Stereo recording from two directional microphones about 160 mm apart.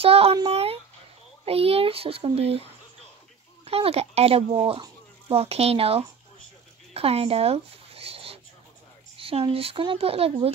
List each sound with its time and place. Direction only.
0.0 s a child's voice: 35° right (ahead or behind)
6.9 s a sound: 40° right (ahead or behind)
9.2 s a child's voice: 35° right (ahead or behind)